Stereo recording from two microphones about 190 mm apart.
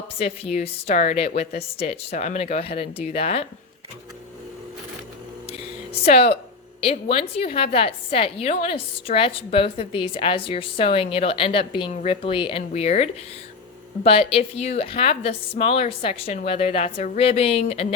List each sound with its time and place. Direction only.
0.2 s a woman's voice: 30° left (ahead or behind)
5.5 s a sound: 30° left (ahead or behind)
6.8 s a woman's voice: 30° left (ahead or behind)